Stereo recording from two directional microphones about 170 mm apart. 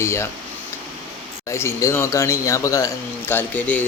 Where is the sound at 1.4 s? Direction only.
15° left (ahead or behind).